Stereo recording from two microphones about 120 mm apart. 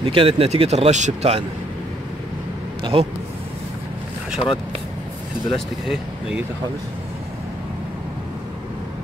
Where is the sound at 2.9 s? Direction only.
50° right (ahead or behind).